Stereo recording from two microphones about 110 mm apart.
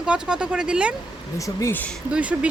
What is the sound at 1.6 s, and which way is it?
Speech, 25° left (ahead or behind).